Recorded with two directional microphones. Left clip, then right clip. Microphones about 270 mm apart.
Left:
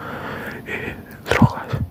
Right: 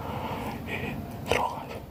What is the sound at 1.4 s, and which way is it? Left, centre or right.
Whispering, left.